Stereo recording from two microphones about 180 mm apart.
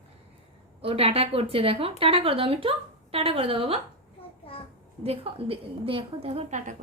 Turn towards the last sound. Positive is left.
turn(degrees=-40)  # may be behind; listen again after turning